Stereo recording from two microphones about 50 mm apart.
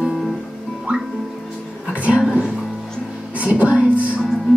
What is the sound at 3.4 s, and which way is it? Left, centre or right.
Music, right.